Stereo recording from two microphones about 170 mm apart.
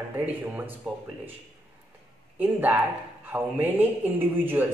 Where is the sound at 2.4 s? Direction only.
10° right (ahead or behind).